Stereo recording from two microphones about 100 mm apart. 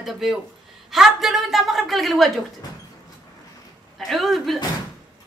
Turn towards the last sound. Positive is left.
turn(degrees=0)  # may be behind; listen again after turning